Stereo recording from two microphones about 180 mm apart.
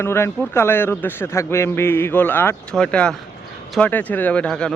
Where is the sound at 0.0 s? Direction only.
15° left (ahead or behind).